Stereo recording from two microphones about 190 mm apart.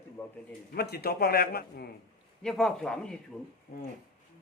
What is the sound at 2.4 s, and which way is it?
Speech, centre (ahead or behind).